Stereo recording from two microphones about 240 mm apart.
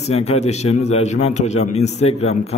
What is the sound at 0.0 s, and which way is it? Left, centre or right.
A man's voice, left.